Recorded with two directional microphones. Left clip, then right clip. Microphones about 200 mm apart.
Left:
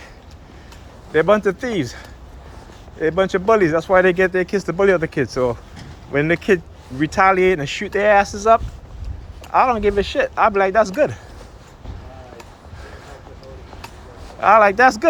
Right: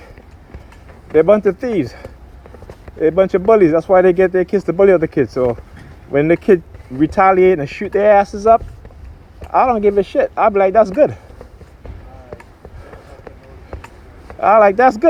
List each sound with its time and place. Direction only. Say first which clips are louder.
1.1 s speech: right 4 dB; 45° right (ahead or behind)
14.3 s speech: right 2 dB; 45° right (ahead or behind)